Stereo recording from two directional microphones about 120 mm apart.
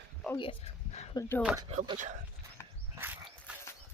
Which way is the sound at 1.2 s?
30° left (ahead or behind).